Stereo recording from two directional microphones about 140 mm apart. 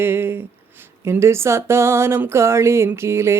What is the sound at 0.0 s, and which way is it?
Speech, 15° right (ahead or behind).